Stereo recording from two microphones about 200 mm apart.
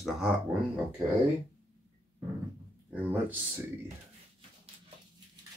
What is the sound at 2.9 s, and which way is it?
Speech, 10° right (ahead or behind).